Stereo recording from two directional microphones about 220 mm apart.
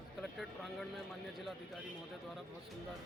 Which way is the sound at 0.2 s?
Centre (ahead or behind).